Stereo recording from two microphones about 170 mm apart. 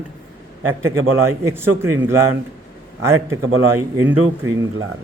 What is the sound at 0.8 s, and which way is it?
A man's voice, 15° right (ahead or behind).